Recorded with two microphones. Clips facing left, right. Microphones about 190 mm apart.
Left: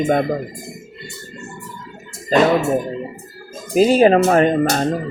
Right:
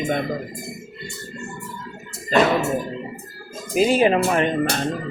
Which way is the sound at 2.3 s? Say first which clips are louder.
Left 3 dB; 40° left (ahead or behind).